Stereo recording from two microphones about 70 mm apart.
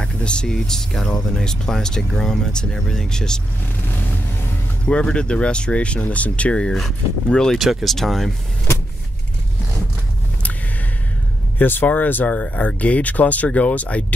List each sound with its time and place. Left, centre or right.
0.0 s speech: centre
4.8 s speech: centre
7.5 s speech: centre
11.5 s speech: left